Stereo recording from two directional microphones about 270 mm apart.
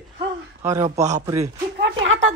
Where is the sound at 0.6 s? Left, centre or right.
Centre.